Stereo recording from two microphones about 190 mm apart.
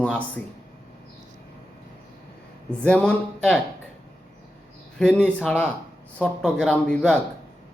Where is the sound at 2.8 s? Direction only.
5° left (ahead or behind).